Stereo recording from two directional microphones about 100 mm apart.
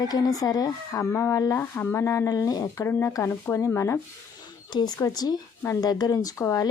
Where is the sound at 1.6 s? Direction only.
25° left (ahead or behind).